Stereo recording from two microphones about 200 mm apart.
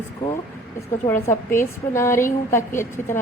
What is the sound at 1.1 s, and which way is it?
A woman's voice, 15° left (ahead or behind).